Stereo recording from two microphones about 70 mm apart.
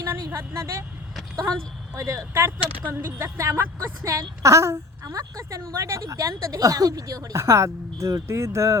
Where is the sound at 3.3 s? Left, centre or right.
Right.